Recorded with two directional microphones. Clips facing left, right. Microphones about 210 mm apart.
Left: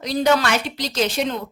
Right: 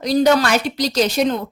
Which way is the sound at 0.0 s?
40° right (ahead or behind).